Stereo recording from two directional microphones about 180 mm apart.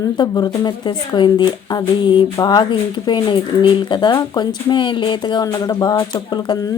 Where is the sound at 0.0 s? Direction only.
20° left (ahead or behind).